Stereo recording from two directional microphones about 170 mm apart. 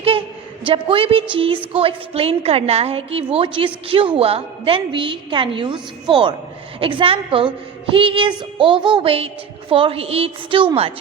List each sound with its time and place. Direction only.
0.6 s a woman's voice: 30° right (ahead or behind)